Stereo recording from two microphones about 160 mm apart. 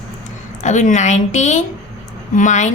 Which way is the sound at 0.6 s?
50° left (ahead or behind).